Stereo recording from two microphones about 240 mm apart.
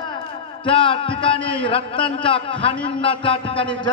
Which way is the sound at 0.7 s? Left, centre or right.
Left.